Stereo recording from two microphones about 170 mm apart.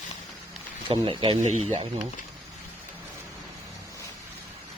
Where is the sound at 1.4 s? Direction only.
40° right (ahead or behind).